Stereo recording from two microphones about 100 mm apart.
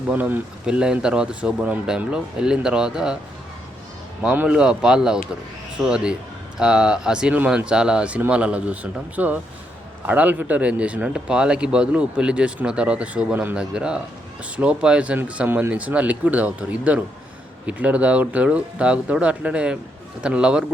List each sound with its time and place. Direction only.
0.1 s speech: 20° right (ahead or behind)
0.6 s speech: 10° right (ahead or behind)
4.2 s speech: 10° right (ahead or behind)